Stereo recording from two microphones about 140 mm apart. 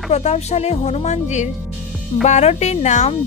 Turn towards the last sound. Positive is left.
turn(degrees=55)  # may be behind; listen again after turning